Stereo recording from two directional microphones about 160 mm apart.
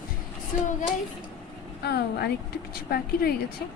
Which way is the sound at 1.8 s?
80° left.